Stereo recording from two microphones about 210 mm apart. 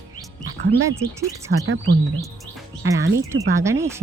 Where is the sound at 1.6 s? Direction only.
60° right (ahead or behind).